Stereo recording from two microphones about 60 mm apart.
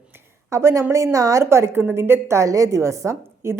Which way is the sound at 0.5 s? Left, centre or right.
Right.